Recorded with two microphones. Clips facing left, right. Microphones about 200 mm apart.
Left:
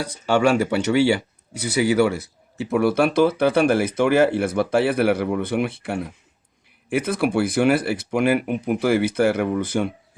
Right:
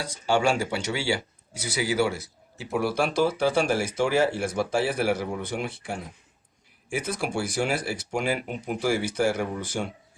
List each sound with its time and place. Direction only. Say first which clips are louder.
0.0 s speech: left 5 dB; 60° left (ahead or behind)